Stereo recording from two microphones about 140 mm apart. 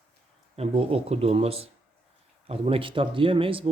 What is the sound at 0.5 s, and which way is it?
Speech, 45° right (ahead or behind).